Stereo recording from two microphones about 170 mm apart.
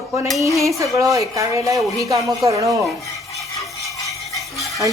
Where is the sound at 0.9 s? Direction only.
20° right (ahead or behind).